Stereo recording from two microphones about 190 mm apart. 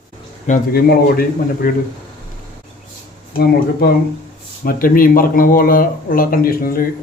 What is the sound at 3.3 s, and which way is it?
Speech, 55° left (ahead or behind).